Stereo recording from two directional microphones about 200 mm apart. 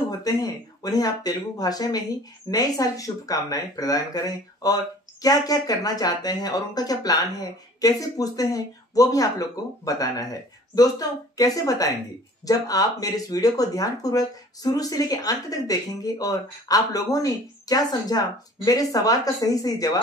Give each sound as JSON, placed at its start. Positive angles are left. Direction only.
{"t": 0.2, "sound": "speech", "side_deg": 20}